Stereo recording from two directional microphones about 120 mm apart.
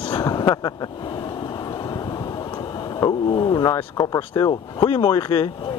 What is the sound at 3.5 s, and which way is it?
Speech, 30° left (ahead or behind).